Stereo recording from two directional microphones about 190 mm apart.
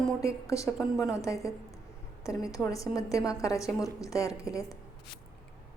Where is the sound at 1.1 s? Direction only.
15° left (ahead or behind).